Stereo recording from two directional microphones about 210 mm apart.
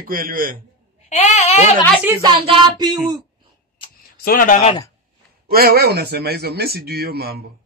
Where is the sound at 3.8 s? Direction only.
25° left (ahead or behind).